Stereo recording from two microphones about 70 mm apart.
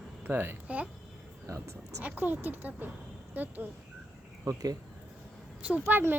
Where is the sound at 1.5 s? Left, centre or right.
Right.